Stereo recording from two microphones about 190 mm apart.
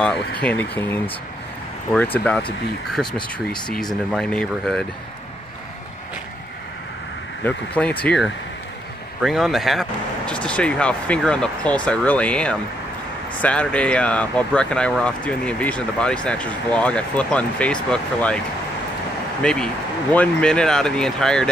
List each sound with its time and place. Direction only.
0.4 s speech: 10° left (ahead or behind)
2.1 s speech: 5° left (ahead or behind)
3.1 s speech: 25° left (ahead or behind)
4.1 s speech: 5° left (ahead or behind)
7.4 s speech: 10° left (ahead or behind)
19.4 s speech: 5° left (ahead or behind)